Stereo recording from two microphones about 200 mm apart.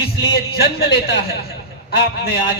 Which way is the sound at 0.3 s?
50° left (ahead or behind).